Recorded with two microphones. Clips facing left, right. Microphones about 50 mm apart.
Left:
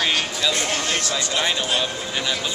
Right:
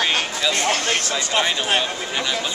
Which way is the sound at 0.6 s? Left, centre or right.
Right.